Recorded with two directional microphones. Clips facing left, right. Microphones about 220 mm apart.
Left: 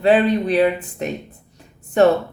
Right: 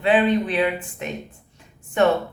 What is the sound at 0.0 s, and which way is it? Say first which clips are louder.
A woman's voice: left 3 dB; 40° left (ahead or behind).